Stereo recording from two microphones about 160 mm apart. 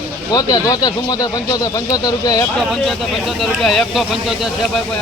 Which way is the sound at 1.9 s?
25° left (ahead or behind).